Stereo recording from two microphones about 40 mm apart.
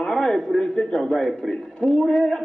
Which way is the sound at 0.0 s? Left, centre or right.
Centre.